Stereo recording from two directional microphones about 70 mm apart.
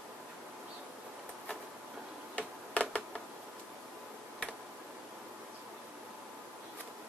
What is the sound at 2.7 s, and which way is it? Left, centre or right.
Finger snapping, centre.